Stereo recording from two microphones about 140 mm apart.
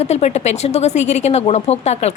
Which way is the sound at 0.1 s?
50° left (ahead or behind).